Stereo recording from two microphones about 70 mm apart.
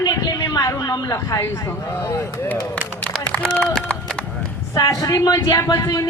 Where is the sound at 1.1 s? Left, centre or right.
Left.